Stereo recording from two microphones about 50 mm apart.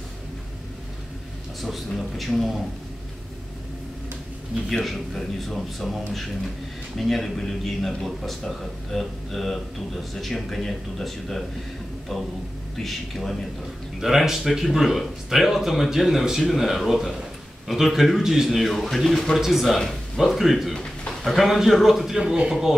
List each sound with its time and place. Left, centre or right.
1.6 s speech: centre
4.6 s speech: centre
12.7 s speech: centre
22.2 s speech: centre
22.5 s speech: centre